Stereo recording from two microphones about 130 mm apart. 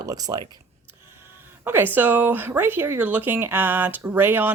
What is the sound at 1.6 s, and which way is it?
Speech, 15° right (ahead or behind).